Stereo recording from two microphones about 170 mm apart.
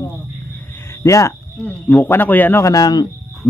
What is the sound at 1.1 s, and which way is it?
Speech, 20° left (ahead or behind).